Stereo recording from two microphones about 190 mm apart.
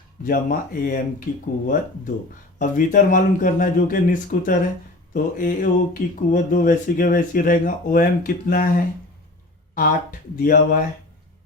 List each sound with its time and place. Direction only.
0.3 s speech: 45° left (ahead or behind)